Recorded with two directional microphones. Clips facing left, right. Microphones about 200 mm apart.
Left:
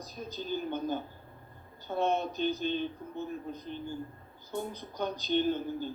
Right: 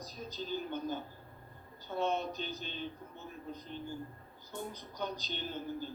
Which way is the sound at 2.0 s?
55° left (ahead or behind).